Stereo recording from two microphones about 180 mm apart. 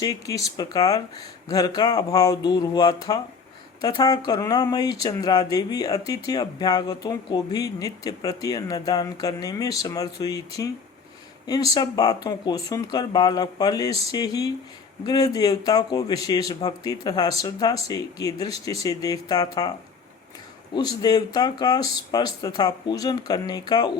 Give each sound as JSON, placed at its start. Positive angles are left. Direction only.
{"t": 0.0, "sound": "speech", "side_deg": 20}
{"t": 20.7, "sound": "speech", "side_deg": 20}